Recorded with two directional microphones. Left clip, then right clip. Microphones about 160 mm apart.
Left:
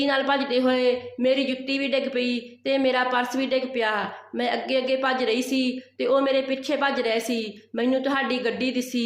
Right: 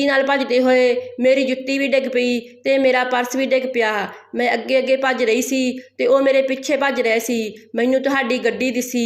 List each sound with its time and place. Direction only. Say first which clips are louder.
0.0 s speech: right 6 dB; 30° right (ahead or behind)